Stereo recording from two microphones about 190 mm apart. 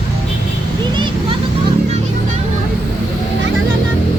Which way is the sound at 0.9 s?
25° right (ahead or behind).